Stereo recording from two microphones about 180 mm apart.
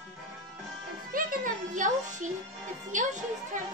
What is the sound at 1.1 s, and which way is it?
Music, 50° right (ahead or behind).